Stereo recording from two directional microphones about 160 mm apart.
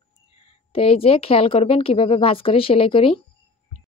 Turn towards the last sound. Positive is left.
turn(degrees=35)  # may be behind; listen again after turning